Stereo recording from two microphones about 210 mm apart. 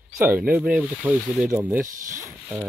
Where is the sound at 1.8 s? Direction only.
40° right (ahead or behind).